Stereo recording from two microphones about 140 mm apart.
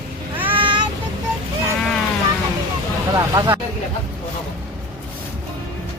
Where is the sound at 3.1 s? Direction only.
25° right (ahead or behind).